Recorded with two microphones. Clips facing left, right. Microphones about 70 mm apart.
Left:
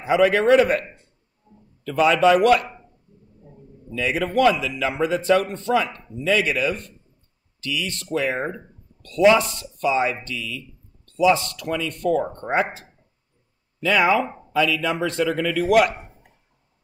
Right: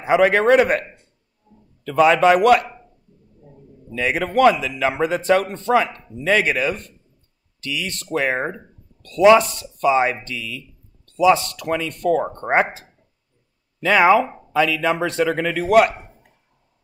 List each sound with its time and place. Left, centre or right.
0.0 s a man's voice: right
1.5 s a sound: left
1.9 s speech: right
3.9 s a man's voice: right
7.7 s speech: right
8.1 s a man's voice: right
9.2 s a man's voice: right
13.7 s a man's voice: right